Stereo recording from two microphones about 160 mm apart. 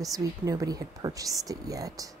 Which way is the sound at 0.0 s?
20° right (ahead or behind).